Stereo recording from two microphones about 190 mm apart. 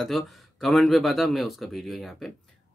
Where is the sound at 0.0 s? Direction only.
Centre (ahead or behind).